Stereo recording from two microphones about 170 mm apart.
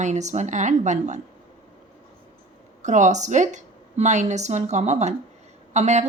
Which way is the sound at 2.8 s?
45° right (ahead or behind).